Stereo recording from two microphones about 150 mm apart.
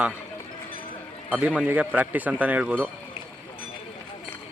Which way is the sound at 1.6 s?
10° right (ahead or behind).